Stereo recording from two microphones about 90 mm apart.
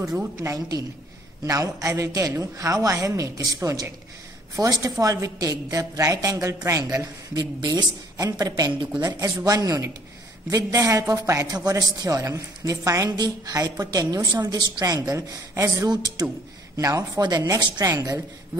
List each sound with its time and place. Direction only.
0.4 s a woman's voice: 35° right (ahead or behind)
11.4 s a woman's voice: 45° right (ahead or behind)
15.9 s speech: 50° right (ahead or behind)
16.7 s a woman's voice: 40° right (ahead or behind)